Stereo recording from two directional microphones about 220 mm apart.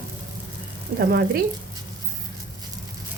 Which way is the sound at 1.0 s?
45° right (ahead or behind).